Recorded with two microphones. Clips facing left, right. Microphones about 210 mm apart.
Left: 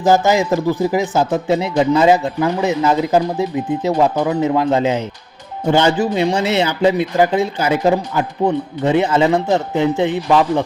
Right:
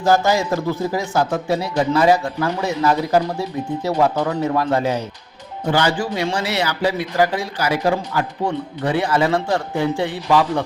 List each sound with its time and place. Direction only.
0.0 s speech: 20° left (ahead or behind)